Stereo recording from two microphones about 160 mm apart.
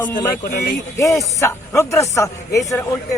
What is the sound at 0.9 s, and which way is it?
Speech, 20° left (ahead or behind).